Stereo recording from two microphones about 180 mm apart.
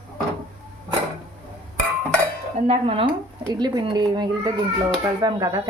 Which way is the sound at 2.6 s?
30° right (ahead or behind).